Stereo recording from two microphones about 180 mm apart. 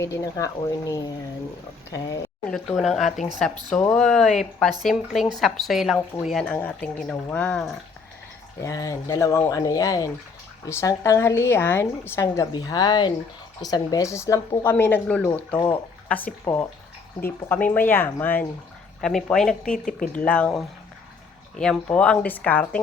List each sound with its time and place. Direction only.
0.0 s speech: 15° left (ahead or behind)
2.5 s a woman's voice: centre (ahead or behind)
3.7 s speech: 15° left (ahead or behind)
3.9 s a woman's voice: 5° left (ahead or behind)
8.6 s speech: 20° left (ahead or behind)
15.5 s speech: 25° left (ahead or behind)
16.0 s a woman's voice: 10° left (ahead or behind)
19.8 s speech: 50° left (ahead or behind)
20.1 s speech: 5° left (ahead or behind)